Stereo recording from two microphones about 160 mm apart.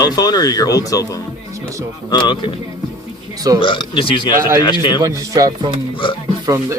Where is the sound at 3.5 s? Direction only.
30° left (ahead or behind).